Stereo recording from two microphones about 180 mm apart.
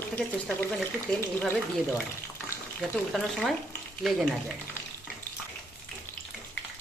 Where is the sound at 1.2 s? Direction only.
10° left (ahead or behind).